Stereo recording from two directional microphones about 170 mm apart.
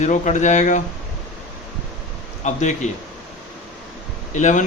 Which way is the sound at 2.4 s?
45° left (ahead or behind).